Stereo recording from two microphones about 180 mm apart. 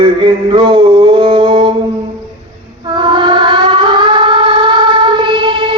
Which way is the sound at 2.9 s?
25° right (ahead or behind).